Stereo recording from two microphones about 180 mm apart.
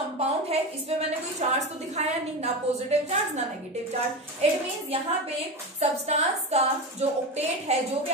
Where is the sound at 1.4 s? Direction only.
40° right (ahead or behind).